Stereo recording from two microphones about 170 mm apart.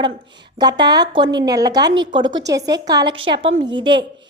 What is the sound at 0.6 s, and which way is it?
A woman's voice, 25° right (ahead or behind).